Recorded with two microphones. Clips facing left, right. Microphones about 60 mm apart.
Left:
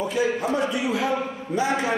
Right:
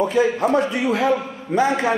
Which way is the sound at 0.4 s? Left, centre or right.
Right.